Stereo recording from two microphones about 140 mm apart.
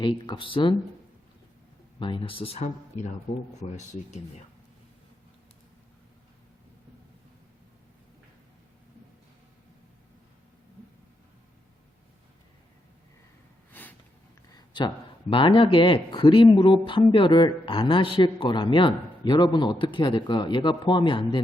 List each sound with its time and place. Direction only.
0.0 s speech: 35° left (ahead or behind)
2.0 s speech: 35° left (ahead or behind)
2.6 s speech: 60° left (ahead or behind)
14.5 s speech: 30° left (ahead or behind)